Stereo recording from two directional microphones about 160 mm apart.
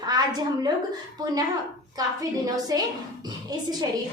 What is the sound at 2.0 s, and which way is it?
A woman's voice, 25° right (ahead or behind).